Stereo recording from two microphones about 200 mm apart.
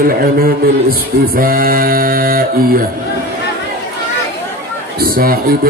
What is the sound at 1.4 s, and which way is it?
A man's voice, 45° right (ahead or behind).